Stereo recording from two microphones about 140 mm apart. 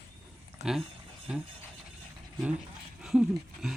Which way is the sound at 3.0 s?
5° right (ahead or behind).